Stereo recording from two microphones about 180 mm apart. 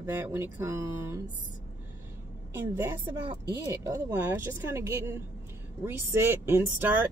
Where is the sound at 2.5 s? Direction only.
15° right (ahead or behind).